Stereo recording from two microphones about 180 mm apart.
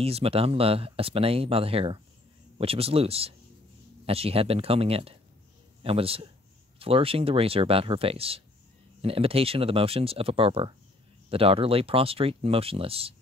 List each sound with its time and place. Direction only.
0.0 s a man's voice: 35° right (ahead or behind)